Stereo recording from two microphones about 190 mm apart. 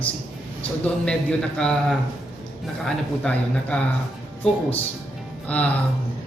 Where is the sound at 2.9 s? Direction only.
5° left (ahead or behind).